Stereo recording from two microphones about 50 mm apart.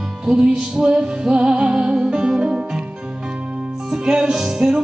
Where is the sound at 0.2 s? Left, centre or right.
Centre.